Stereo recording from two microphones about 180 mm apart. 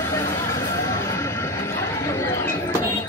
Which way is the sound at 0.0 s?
15° left (ahead or behind).